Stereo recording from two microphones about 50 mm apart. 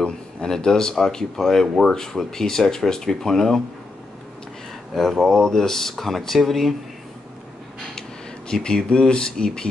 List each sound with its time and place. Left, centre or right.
0.6 s speech: centre
4.9 s speech: centre
8.6 s speech: centre